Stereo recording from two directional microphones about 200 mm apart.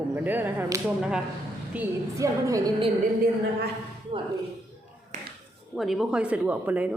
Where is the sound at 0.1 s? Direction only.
10° right (ahead or behind).